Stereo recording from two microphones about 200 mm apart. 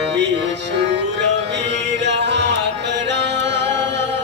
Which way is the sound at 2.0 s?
60° right (ahead or behind).